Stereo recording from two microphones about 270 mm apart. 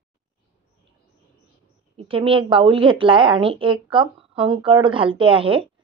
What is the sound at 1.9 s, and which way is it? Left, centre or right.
A woman's voice, centre.